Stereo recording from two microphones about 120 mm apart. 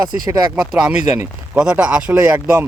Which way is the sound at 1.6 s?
10° right (ahead or behind).